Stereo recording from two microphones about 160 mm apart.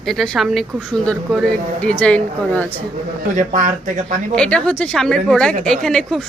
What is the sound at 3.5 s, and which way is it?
Speech, 50° right (ahead or behind).